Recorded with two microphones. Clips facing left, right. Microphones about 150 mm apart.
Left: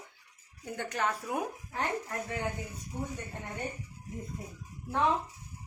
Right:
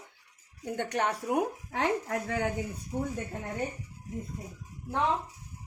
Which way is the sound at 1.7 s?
90° right.